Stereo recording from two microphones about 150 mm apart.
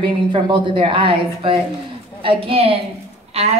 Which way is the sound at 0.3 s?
30° right (ahead or behind).